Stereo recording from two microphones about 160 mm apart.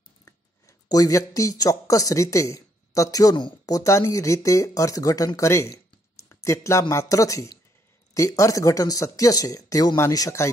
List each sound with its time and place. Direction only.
0.2 s speech: 20° left (ahead or behind)